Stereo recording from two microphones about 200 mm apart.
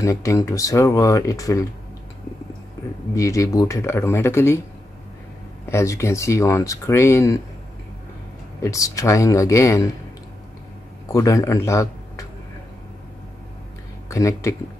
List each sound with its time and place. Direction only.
0.0 s speech: 15° left (ahead or behind)
3.2 s speech: 15° left (ahead or behind)
5.7 s speech: 15° left (ahead or behind)
8.5 s speech: 15° left (ahead or behind)
11.1 s speech: 15° left (ahead or behind)
14.0 s speech: 15° left (ahead or behind)